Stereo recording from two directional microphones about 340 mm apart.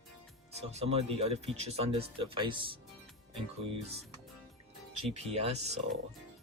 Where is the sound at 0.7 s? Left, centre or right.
Centre.